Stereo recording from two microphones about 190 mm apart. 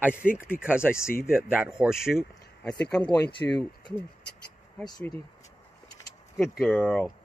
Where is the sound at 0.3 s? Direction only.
10° left (ahead or behind).